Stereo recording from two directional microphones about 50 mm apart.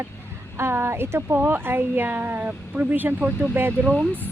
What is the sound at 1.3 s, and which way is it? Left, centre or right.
Speech, right.